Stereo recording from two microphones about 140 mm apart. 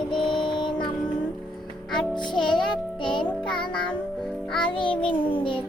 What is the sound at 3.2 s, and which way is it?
Music, 5° left (ahead or behind).